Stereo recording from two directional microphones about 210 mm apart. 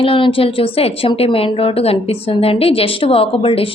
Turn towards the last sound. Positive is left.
turn(degrees=25)  # may be behind; listen again after turning